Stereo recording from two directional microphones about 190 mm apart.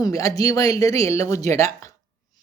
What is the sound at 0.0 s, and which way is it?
Speech, 15° left (ahead or behind).